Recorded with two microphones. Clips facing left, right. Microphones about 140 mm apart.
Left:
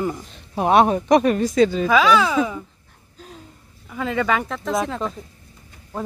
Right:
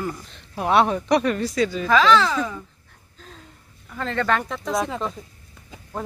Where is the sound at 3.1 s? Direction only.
15° left (ahead or behind).